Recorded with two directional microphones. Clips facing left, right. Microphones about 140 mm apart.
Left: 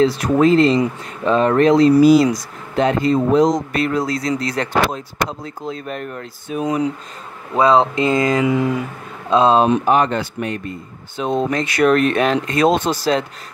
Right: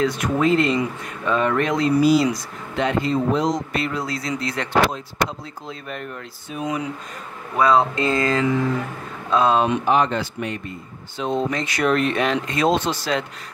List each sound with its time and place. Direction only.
0.0 s speech: 35° left (ahead or behind)
7.5 s speech: 20° left (ahead or behind)
9.3 s speech: 25° left (ahead or behind)
9.8 s speech: 50° left (ahead or behind)